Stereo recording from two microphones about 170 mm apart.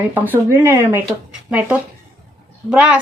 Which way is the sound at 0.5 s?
15° right (ahead or behind).